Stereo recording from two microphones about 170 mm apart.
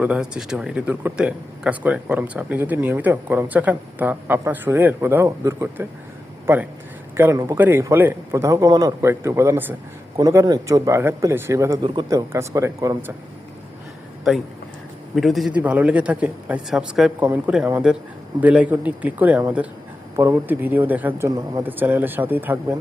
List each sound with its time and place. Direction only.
0.0 s a man's voice: 5° right (ahead or behind)
14.3 s a man's voice: centre (ahead or behind)